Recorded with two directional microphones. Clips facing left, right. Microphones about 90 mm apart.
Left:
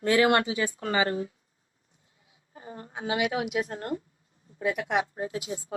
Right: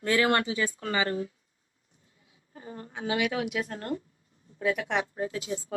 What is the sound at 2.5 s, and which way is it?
A woman's voice, 25° left (ahead or behind).